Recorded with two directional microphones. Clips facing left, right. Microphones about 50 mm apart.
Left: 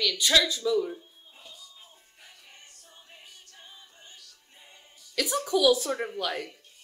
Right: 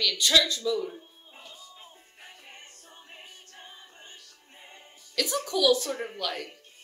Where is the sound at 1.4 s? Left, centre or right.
Right.